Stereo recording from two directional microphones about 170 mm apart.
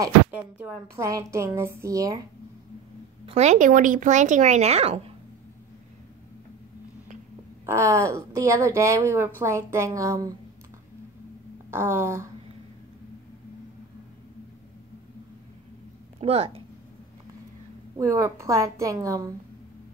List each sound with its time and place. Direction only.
0.0 s a woman's voice: 15° right (ahead or behind)
3.3 s speech: 40° right (ahead or behind)
7.6 s a woman's voice: 15° right (ahead or behind)
11.7 s a woman's voice: 15° right (ahead or behind)
16.2 s a woman's voice: 35° right (ahead or behind)
17.9 s a woman's voice: 20° right (ahead or behind)